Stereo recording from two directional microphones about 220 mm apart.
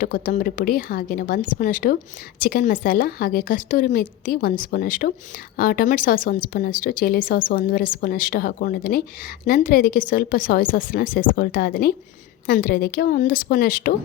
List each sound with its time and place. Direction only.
0.0 s a woman's voice: 40° left (ahead or behind)